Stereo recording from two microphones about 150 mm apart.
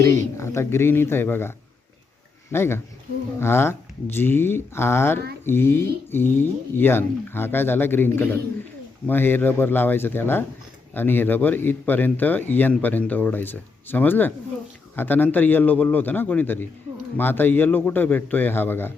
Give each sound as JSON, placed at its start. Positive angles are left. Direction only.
{"t": 0.0, "sound": "speech", "side_deg": 20}